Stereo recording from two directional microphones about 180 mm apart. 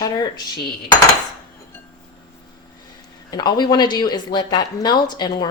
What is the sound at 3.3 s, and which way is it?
Speech, 25° left (ahead or behind).